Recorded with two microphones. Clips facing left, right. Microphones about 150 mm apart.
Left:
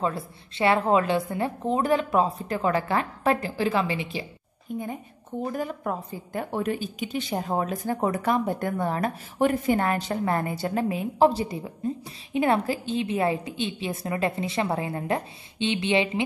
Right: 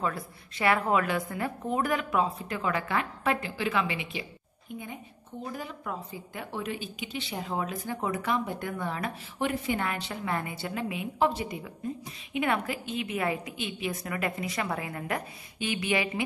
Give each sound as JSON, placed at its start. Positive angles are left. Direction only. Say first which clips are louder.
{"t": 0.0, "sound": "a woman's voice", "louder": "left 4 dB", "side_deg": 25}